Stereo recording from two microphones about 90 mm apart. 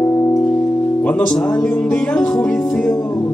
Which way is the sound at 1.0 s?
10° left (ahead or behind).